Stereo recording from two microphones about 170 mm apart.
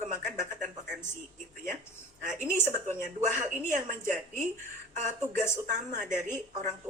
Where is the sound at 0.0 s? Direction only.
45° right (ahead or behind).